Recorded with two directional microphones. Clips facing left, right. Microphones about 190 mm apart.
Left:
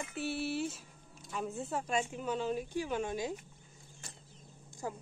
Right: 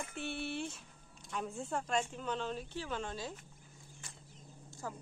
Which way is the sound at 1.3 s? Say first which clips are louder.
Left 2 dB; 5° left (ahead or behind).